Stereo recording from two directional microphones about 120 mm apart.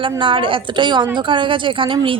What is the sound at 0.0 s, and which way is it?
A woman's voice, 45° right (ahead or behind).